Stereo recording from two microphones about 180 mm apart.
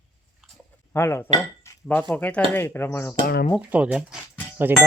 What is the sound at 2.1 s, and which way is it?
Speech, 10° left (ahead or behind).